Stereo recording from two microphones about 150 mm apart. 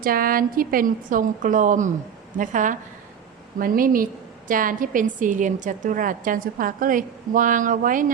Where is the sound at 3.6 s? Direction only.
70° right (ahead or behind).